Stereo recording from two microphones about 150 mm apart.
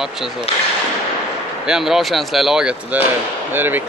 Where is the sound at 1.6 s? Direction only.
5° right (ahead or behind).